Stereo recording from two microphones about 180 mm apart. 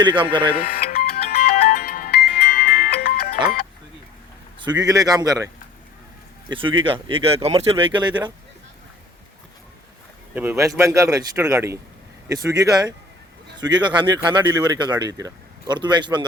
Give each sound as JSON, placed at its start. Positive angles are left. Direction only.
{"t": 0.0, "sound": "speech", "side_deg": -25}
{"t": 0.5, "sound": "music", "side_deg": 55}
{"t": 4.6, "sound": "speech", "side_deg": -20}
{"t": 6.5, "sound": "speech", "side_deg": -30}
{"t": 10.3, "sound": "speech", "side_deg": -15}